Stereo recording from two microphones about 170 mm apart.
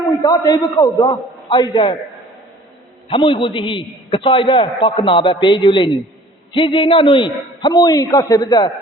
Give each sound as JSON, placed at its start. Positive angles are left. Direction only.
{"t": 0.2, "sound": "a man's voice", "side_deg": 20}
{"t": 3.1, "sound": "a man's voice", "side_deg": 30}